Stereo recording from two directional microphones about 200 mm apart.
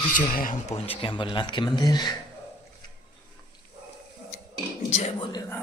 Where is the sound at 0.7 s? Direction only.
30° left (ahead or behind).